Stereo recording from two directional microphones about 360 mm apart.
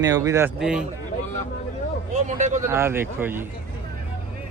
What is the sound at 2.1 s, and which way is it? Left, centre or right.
Speech, centre.